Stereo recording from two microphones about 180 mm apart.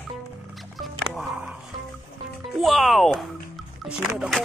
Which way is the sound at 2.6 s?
Centre (ahead or behind).